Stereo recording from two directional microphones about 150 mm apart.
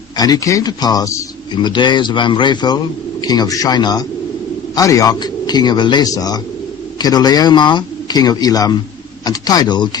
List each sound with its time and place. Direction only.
0.2 s a man's voice: 25° left (ahead or behind)